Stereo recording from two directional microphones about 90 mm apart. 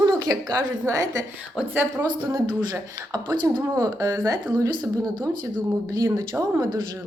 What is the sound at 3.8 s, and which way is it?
Speech, 35° right (ahead or behind).